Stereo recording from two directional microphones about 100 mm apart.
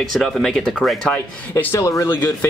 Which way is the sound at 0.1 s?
Centre (ahead or behind).